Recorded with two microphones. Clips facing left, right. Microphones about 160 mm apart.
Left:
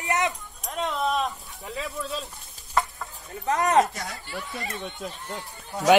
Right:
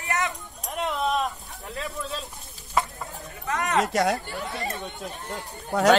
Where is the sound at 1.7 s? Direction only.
Centre (ahead or behind).